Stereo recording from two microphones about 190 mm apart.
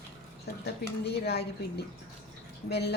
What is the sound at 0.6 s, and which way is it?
Speech, 60° left (ahead or behind).